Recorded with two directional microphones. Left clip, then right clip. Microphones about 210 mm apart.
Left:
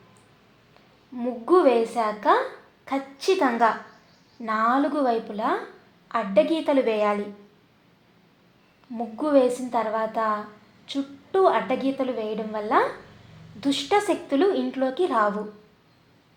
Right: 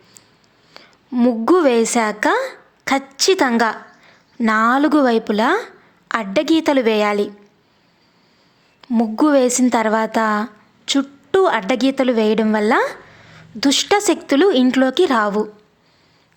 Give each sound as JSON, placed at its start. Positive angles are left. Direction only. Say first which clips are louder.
{"t": 0.7, "sound": "a woman's voice", "louder": "right 15 dB", "side_deg": -45}
{"t": 8.9, "sound": "a woman's voice", "louder": "right 8 dB", "side_deg": -50}